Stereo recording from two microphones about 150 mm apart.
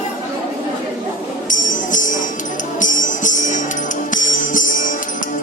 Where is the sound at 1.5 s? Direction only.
60° left (ahead or behind).